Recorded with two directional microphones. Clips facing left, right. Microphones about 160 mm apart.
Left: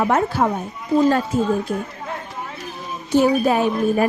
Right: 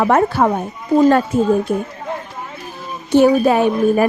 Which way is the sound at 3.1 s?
70° right (ahead or behind).